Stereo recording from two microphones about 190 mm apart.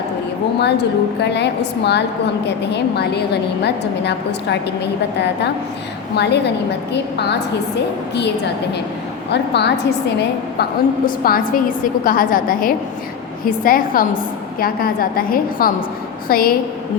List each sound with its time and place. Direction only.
0.6 s a woman's voice: 60° left (ahead or behind)
6.1 s a woman's voice: 60° left (ahead or behind)
9.3 s a woman's voice: 60° left (ahead or behind)